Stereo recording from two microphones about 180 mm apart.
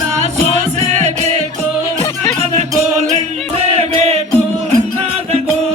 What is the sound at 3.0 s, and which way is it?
Music, 35° right (ahead or behind).